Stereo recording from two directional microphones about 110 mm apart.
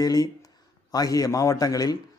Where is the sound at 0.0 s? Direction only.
35° left (ahead or behind).